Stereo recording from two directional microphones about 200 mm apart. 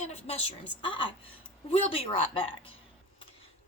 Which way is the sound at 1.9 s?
25° left (ahead or behind).